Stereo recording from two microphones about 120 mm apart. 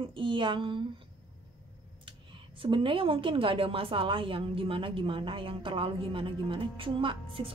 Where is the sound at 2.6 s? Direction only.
45° right (ahead or behind).